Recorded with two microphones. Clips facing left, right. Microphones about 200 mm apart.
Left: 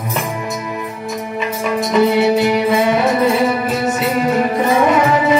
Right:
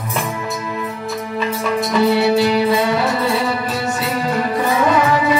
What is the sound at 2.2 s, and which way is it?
Music, 20° left (ahead or behind).